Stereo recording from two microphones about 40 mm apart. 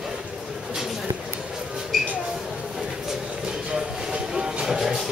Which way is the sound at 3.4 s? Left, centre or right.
Centre.